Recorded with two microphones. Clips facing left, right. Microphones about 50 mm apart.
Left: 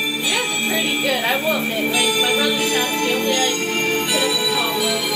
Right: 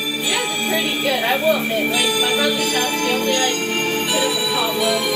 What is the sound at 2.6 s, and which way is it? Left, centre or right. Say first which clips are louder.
Music: even; centre.